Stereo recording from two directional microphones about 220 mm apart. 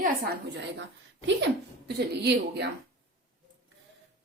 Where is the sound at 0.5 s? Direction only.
55° right (ahead or behind).